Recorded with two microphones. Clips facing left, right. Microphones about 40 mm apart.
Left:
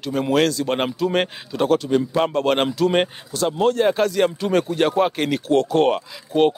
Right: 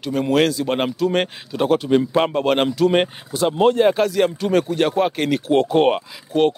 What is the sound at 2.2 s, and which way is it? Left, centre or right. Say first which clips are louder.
Speech: right 1 dB; centre.